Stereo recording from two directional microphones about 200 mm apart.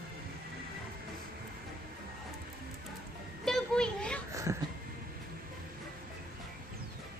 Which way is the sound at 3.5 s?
Centre (ahead or behind).